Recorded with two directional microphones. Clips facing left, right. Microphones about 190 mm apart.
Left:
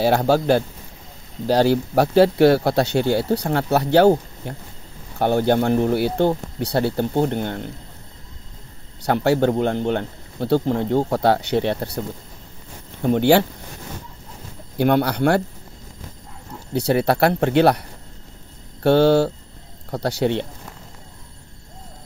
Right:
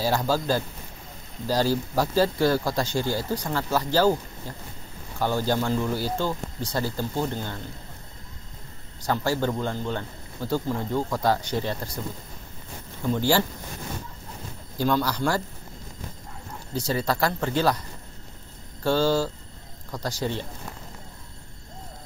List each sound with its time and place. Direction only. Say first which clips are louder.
0.0 s speech: left 7 dB; 65° left (ahead or behind)
9.0 s speech: left 7 dB; 65° left (ahead or behind)
13.0 s speech: left 8 dB; 65° left (ahead or behind)
14.8 s speech: left 6 dB; 65° left (ahead or behind)
16.7 s speech: left 8 dB; 65° left (ahead or behind)